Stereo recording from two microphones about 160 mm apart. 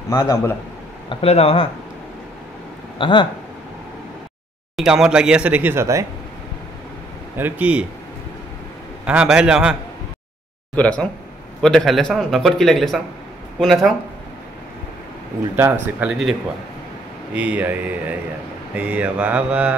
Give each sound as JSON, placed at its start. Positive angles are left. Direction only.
{"t": 0.1, "sound": "a man's voice", "side_deg": 20}
{"t": 1.0, "sound": "speech", "side_deg": 40}
{"t": 3.0, "sound": "speech", "side_deg": 30}
{"t": 4.7, "sound": "speech", "side_deg": -5}
{"t": 7.3, "sound": "speech", "side_deg": -10}
{"t": 9.0, "sound": "a man's voice", "side_deg": -5}
{"t": 10.8, "sound": "a man's voice", "side_deg": 5}
{"t": 16.0, "sound": "a man's voice", "side_deg": 0}